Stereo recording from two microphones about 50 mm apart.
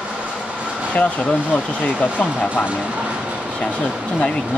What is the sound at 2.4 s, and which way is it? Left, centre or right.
Speech, right.